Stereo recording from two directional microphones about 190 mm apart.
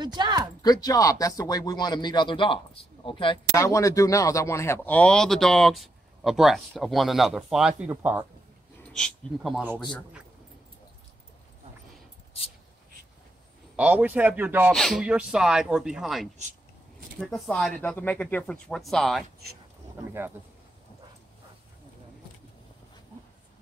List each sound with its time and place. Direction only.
0.0 s speech: 20° right (ahead or behind)
0.6 s speech: 20° left (ahead or behind)
3.5 s a man's voice: 15° left (ahead or behind); by 8.3 s 10° right (ahead or behind)
8.9 s speech: centre (ahead or behind)
13.7 s a man's voice: 10° right (ahead or behind)
14.7 s speech: centre (ahead or behind)
20.1 s a man's voice: 10° right (ahead or behind)